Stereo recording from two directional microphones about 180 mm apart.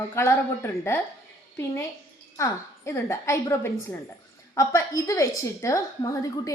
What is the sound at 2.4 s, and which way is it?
A woman's voice, 15° left (ahead or behind).